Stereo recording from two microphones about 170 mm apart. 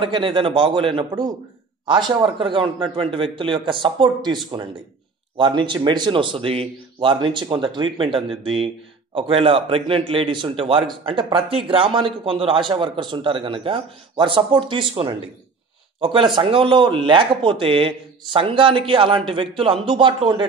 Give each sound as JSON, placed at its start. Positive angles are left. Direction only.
{"t": 0.0, "sound": "speech", "side_deg": -30}